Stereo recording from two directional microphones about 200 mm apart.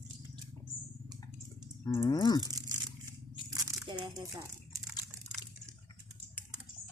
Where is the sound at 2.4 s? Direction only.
20° right (ahead or behind).